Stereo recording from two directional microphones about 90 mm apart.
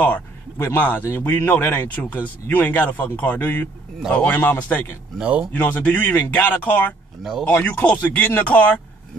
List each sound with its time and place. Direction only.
0.7 s speech: 20° left (ahead or behind)
5.2 s speech: 15° right (ahead or behind)
5.5 s speech: 20° left (ahead or behind)